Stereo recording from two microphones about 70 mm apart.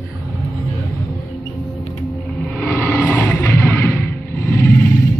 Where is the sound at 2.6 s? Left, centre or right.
Left.